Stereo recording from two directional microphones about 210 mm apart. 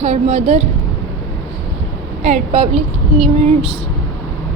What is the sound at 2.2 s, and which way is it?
Speech, 30° right (ahead or behind).